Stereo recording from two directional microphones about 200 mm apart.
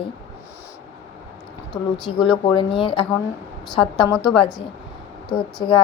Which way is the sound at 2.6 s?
25° left (ahead or behind).